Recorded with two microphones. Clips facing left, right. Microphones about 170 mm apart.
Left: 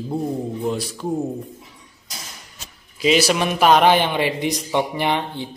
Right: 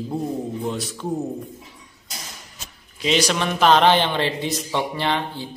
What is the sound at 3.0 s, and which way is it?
Speech, 5° left (ahead or behind).